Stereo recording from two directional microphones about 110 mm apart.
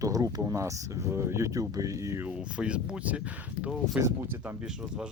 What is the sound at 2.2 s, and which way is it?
Speech, 10° right (ahead or behind).